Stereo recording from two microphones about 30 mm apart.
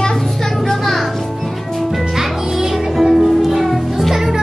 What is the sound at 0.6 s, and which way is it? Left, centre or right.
Music, centre.